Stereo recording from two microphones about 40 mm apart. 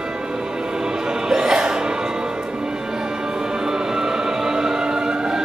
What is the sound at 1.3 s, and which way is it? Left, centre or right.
Music, centre.